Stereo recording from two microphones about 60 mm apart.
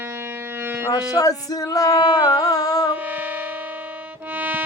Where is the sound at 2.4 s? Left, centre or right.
Left.